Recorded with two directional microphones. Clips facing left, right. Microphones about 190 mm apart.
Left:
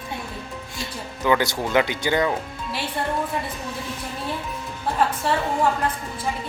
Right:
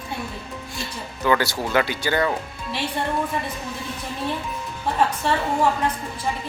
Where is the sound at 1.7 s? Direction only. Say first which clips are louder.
Left 1 dB; 20° left (ahead or behind).